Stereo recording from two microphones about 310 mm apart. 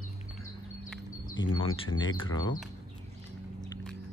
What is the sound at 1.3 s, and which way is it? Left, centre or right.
Speech, left.